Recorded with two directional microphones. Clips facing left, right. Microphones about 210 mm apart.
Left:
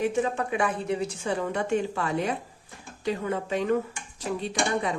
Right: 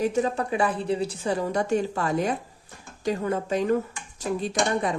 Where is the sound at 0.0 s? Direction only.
40° right (ahead or behind).